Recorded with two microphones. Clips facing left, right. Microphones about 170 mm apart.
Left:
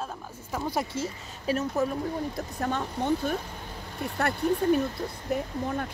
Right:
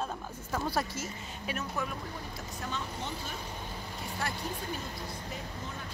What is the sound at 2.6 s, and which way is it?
Speech, 55° left (ahead or behind).